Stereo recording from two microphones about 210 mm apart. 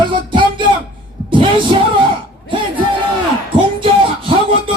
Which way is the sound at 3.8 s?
25° right (ahead or behind).